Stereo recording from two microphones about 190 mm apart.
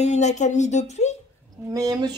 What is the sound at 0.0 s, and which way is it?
Speech, 40° left (ahead or behind).